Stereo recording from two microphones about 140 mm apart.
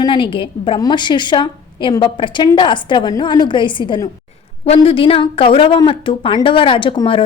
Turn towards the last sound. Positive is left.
turn(degrees=40)  # may be behind; listen again after turning